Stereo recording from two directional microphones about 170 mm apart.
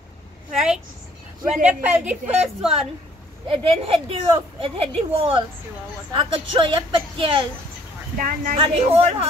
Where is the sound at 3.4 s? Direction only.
35° right (ahead or behind).